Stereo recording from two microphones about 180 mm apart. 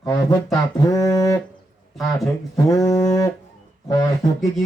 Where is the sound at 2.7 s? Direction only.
20° left (ahead or behind).